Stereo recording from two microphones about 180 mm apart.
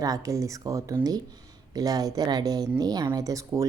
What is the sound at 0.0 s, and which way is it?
Speech, 20° right (ahead or behind).